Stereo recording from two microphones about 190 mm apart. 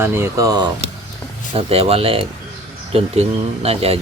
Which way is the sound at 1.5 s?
30° right (ahead or behind).